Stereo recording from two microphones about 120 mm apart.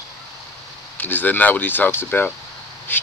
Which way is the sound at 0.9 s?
15° left (ahead or behind).